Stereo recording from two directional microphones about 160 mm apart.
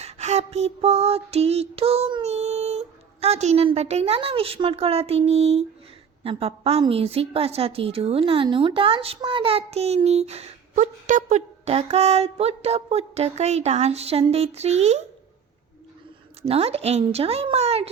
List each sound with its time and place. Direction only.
0.0 s a sound: 45° right (ahead or behind)
6.2 s a woman's voice: 40° right (ahead or behind)
16.5 s a woman's voice: 40° right (ahead or behind)